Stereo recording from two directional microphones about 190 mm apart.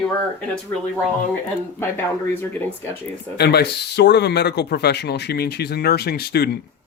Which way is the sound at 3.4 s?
60° left (ahead or behind).